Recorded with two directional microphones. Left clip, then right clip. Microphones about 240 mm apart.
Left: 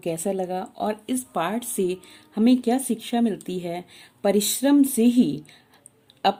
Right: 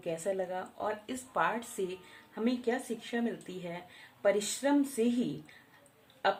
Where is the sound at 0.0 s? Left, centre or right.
Left.